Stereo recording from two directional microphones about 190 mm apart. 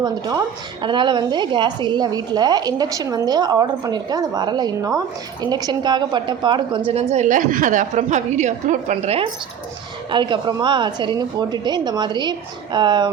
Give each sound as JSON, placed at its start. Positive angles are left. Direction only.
{"t": 0.0, "sound": "a woman's voice", "side_deg": -20}